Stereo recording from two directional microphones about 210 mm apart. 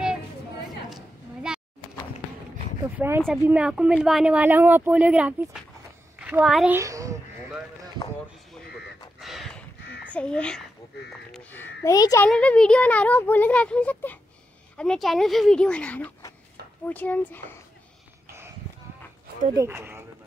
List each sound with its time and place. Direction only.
2.8 s a woman's voice: 10° right (ahead or behind)
6.8 s a child's voice: 15° right (ahead or behind)
9.2 s a sound: centre (ahead or behind)
10.1 s speech: 5° left (ahead or behind)
12.3 s speech: 5° left (ahead or behind)
19.5 s speech: 15° right (ahead or behind)